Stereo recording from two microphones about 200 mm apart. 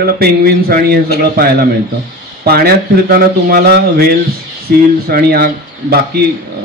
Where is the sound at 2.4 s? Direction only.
50° right (ahead or behind).